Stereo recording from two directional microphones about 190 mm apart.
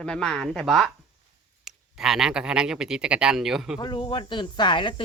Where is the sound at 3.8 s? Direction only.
25° left (ahead or behind).